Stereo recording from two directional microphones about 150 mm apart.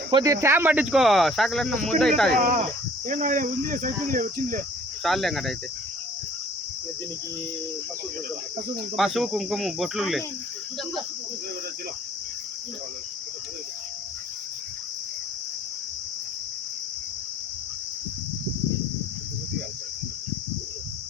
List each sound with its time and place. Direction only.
0.1 s speech: 25° right (ahead or behind); by 2.4 s 5° left (ahead or behind)
2.4 s speech: 60° right (ahead or behind)
5.0 s speech: centre (ahead or behind)
9.0 s speech: centre (ahead or behind)